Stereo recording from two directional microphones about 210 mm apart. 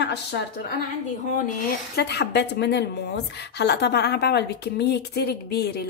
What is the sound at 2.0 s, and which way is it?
A woman's voice, 55° left (ahead or behind).